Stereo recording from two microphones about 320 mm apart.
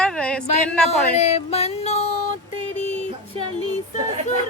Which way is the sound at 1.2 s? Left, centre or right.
Centre.